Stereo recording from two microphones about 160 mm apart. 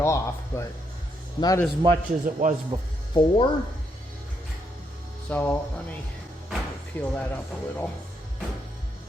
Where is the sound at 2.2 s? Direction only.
55° right (ahead or behind).